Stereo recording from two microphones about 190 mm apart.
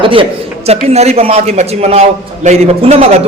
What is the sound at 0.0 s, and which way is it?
A man's voice, 25° right (ahead or behind).